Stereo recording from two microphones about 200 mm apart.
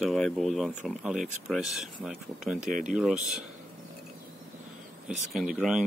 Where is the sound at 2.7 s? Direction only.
40° right (ahead or behind).